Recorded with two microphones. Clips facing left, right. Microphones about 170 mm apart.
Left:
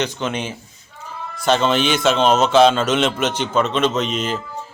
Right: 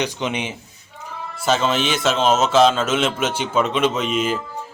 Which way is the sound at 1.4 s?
5° right (ahead or behind).